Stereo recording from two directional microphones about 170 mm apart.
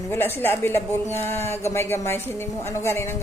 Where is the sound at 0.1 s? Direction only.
15° left (ahead or behind).